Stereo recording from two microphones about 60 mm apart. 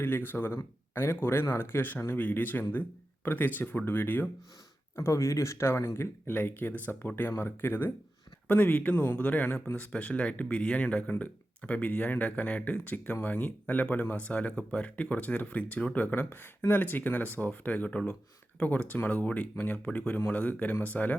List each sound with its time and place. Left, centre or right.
0.0 s speech: left
4.9 s speech: left
7.2 s speech: left